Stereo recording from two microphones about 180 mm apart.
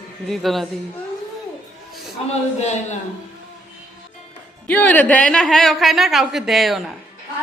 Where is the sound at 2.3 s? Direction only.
40° left (ahead or behind).